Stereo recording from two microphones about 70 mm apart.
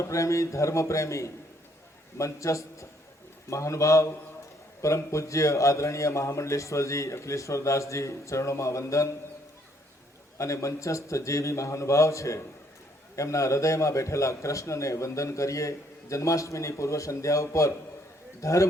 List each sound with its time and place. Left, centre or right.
0.0 s a man's voice: left
10.3 s a man's voice: left